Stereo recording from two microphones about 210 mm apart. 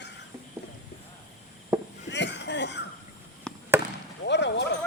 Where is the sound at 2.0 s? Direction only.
55° left (ahead or behind).